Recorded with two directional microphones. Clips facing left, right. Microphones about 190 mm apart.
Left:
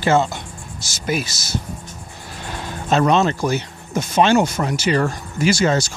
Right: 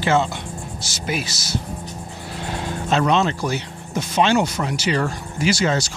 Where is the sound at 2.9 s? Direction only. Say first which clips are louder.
Left 3 dB; 45° left (ahead or behind).